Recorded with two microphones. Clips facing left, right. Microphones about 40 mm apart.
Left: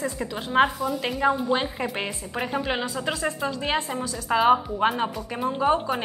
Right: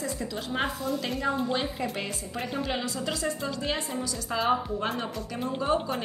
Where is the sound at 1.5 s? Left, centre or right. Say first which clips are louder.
Left 4 dB; left.